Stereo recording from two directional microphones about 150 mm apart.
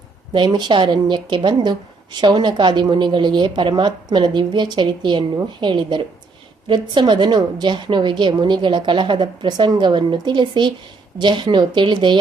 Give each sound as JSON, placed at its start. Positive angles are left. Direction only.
{"t": 0.3, "sound": "a woman's voice", "side_deg": -30}